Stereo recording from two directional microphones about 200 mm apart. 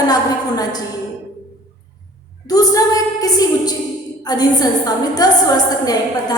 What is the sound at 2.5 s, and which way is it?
A woman's voice, 20° left (ahead or behind).